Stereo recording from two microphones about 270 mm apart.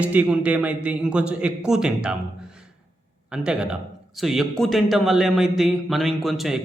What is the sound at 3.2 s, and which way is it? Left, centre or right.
Speech, centre.